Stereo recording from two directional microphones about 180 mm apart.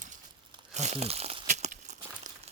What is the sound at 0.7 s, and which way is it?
Crumpling, 40° right (ahead or behind).